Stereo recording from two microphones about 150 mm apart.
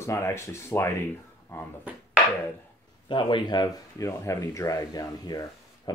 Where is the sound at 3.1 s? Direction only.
30° left (ahead or behind).